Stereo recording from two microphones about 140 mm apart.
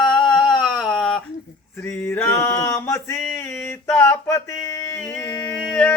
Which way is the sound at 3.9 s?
15° left (ahead or behind).